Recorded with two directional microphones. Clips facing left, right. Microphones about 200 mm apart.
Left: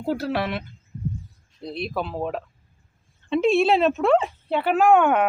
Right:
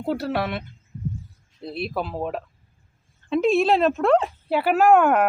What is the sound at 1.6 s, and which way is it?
Speech, 5° right (ahead or behind).